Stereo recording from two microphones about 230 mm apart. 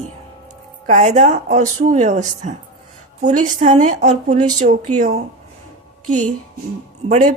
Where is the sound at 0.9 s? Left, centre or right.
Right.